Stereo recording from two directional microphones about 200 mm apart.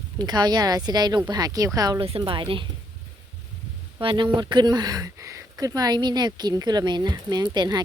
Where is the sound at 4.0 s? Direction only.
25° right (ahead or behind).